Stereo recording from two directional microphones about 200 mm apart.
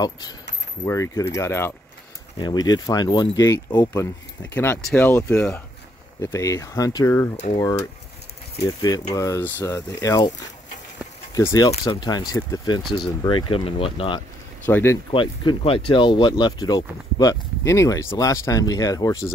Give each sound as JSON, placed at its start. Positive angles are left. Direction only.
{"t": 0.8, "sound": "speech", "side_deg": 15}
{"t": 11.3, "sound": "speech", "side_deg": 15}
{"t": 14.7, "sound": "speech", "side_deg": 10}
{"t": 15.0, "sound": "speech", "side_deg": 25}